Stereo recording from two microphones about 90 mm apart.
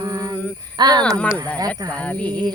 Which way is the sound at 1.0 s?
10° left (ahead or behind).